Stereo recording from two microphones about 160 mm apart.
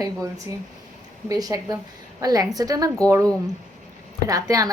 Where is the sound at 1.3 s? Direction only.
20° right (ahead or behind).